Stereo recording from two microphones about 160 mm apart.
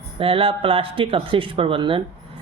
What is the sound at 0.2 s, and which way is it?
Speech, 35° right (ahead or behind).